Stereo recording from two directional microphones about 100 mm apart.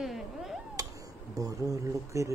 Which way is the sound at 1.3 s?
35° right (ahead or behind).